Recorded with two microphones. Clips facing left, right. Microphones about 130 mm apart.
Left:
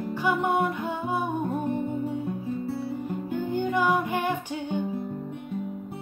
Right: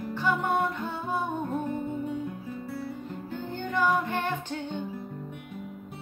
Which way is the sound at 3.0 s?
10° left (ahead or behind).